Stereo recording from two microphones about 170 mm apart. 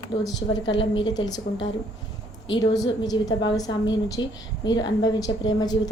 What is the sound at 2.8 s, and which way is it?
A woman's voice, 25° left (ahead or behind).